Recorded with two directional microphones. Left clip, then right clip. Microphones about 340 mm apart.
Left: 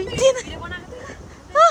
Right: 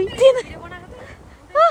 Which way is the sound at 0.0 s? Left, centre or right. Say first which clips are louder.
Right 4 dB; centre.